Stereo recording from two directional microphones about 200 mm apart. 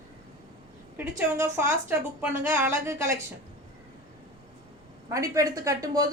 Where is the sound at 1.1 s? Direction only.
10° right (ahead or behind).